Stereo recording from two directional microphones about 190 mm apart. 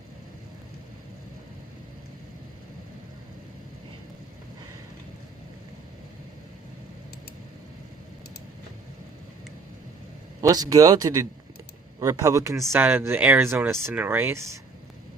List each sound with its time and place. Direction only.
10.4 s speech: 20° right (ahead or behind)